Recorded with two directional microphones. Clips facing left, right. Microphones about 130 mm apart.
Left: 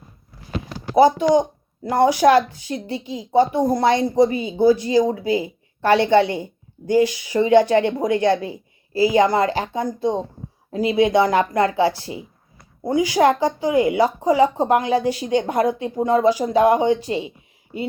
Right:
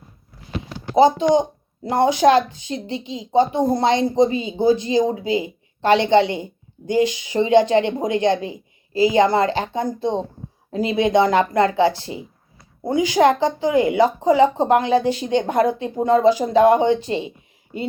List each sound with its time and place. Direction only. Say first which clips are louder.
0.9 s speech: even; 20° right (ahead or behind)